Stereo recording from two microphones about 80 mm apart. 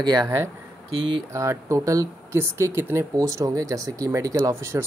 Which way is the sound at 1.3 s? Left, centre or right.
Right.